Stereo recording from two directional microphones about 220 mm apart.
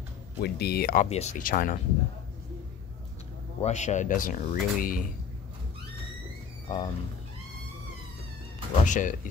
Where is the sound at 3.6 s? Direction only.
30° left (ahead or behind).